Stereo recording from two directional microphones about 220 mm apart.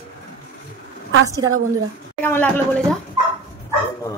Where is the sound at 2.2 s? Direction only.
10° left (ahead or behind).